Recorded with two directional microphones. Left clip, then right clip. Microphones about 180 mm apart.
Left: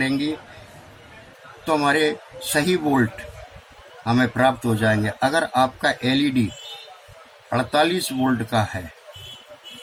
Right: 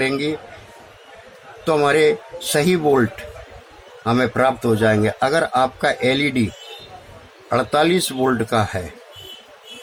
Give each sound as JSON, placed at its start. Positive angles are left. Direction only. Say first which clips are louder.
{"t": 1.6, "sound": "speech", "louder": "right 4 dB", "side_deg": -35}
{"t": 4.0, "sound": "speech", "louder": "right 2 dB", "side_deg": -35}
{"t": 7.5, "sound": "speech", "louder": "right 3 dB", "side_deg": -40}